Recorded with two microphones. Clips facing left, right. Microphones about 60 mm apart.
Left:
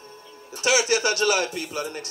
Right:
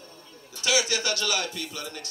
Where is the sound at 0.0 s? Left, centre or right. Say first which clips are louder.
Left 4 dB; left.